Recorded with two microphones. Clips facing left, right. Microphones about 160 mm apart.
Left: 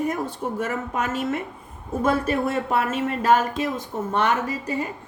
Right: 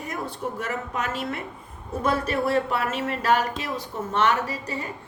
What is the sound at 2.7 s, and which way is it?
A woman's voice, 45° left (ahead or behind).